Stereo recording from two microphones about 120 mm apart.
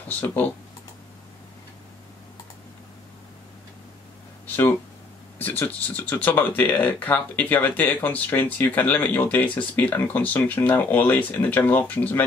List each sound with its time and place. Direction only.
0.1 s speech: 15° left (ahead or behind)
5.4 s speech: 15° left (ahead or behind)